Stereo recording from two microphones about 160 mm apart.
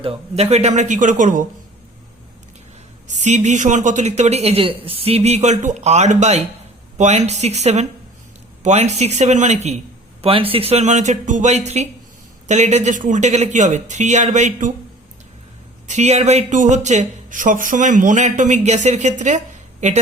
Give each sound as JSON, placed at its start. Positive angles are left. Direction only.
{"t": 0.0, "sound": "speech", "side_deg": -40}
{"t": 3.1, "sound": "speech", "side_deg": -50}
{"t": 15.9, "sound": "speech", "side_deg": -45}